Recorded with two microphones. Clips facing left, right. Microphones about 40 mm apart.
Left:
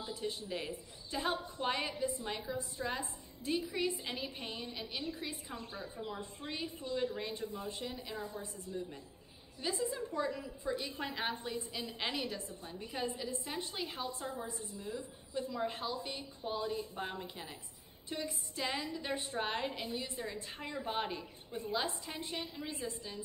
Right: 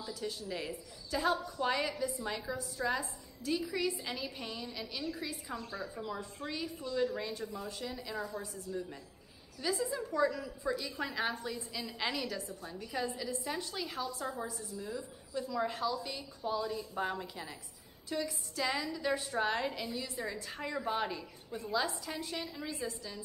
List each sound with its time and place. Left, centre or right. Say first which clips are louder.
0.0 s a woman's voice: even; left